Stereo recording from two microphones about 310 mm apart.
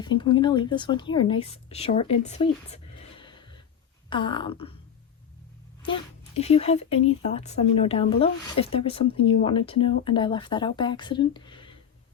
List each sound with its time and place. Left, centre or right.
0.0 s speech: centre
3.2 s gasp: centre
4.1 s speech: centre
5.8 s speech: centre